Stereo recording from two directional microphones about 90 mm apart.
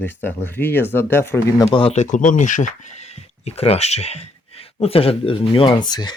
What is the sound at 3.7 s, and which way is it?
Speech, 90° left.